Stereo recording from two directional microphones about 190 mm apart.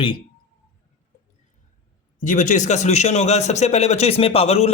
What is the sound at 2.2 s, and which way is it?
A man's voice, 40° left (ahead or behind).